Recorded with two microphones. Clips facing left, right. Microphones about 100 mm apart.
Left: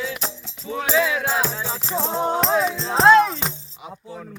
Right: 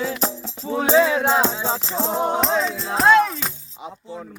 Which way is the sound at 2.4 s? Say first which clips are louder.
Left 1 dB; 5° left (ahead or behind).